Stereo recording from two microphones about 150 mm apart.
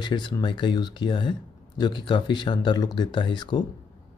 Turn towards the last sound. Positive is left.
turn(degrees=30)  # may be behind; listen again after turning